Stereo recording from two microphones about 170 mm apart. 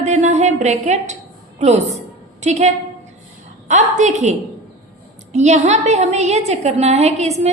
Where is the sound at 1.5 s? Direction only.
40° right (ahead or behind).